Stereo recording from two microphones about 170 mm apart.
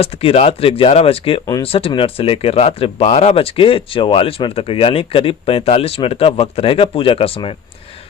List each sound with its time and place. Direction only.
0.0 s speech: 35° left (ahead or behind)